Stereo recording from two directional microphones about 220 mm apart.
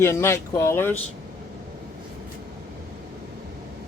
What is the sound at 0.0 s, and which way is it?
Speech, 10° left (ahead or behind).